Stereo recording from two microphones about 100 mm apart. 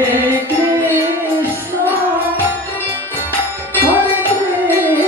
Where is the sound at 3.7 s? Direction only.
20° right (ahead or behind).